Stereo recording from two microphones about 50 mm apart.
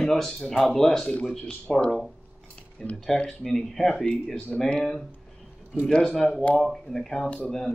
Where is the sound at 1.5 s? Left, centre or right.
Centre.